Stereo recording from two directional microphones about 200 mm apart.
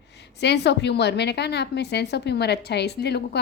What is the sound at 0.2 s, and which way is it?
A woman's voice, 55° left (ahead or behind).